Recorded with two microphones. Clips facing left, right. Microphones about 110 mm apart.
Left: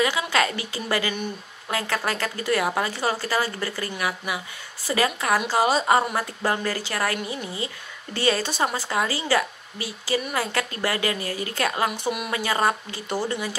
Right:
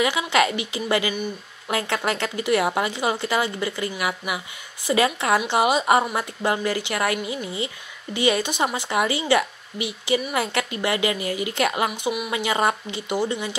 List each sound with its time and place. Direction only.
0.0 s a woman's voice: 20° right (ahead or behind)